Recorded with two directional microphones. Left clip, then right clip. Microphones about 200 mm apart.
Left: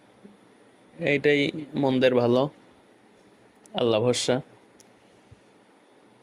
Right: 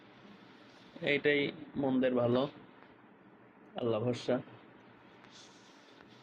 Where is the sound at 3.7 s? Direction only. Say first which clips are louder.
Left 11 dB; 60° left (ahead or behind).